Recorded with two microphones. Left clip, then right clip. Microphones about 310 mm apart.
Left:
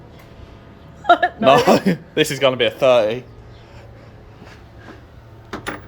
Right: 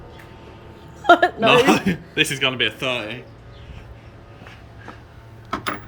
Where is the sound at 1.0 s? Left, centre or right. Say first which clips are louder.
Even; right.